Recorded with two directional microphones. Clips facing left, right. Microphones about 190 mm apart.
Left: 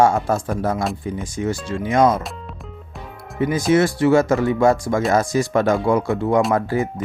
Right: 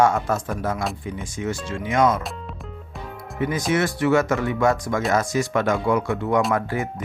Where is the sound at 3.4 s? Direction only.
30° left (ahead or behind).